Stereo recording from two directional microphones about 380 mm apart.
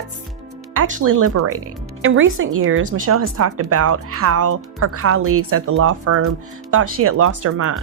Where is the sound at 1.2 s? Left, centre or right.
Right.